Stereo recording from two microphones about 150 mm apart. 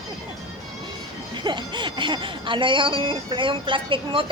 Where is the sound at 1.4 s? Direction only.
30° right (ahead or behind).